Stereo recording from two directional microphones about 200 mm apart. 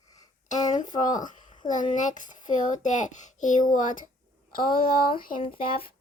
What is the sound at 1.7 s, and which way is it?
A child's voice, 40° left (ahead or behind).